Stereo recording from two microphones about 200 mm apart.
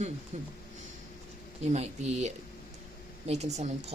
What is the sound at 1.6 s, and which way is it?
Speech, 35° right (ahead or behind).